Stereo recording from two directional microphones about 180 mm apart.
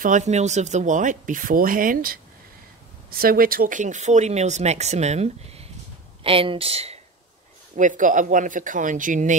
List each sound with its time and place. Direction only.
0.0 s speech: 40° right (ahead or behind)
7.7 s speech: 45° right (ahead or behind)